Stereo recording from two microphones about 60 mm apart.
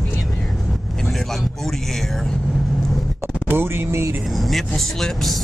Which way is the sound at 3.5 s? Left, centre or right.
Right.